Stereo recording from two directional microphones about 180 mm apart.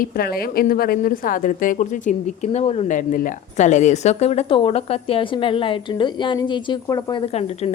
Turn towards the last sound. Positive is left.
turn(degrees=35)  # may be behind; listen again after turning